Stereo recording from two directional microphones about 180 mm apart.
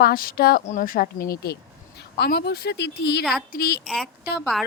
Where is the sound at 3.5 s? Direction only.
60° left (ahead or behind).